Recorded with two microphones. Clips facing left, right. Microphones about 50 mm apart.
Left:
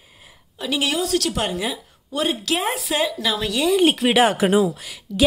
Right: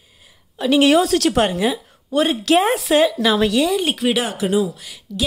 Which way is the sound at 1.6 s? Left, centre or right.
Right.